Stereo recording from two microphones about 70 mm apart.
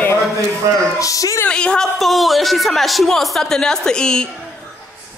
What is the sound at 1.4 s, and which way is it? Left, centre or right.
Speech, centre.